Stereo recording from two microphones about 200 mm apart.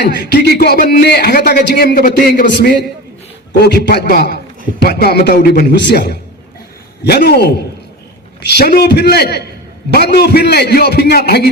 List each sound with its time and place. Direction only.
0.2 s a man's voice: 50° left (ahead or behind)
8.4 s a man's voice: 55° left (ahead or behind)